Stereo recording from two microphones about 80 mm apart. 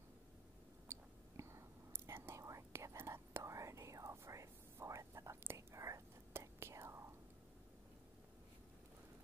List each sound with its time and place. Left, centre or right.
0.8 s whispering: right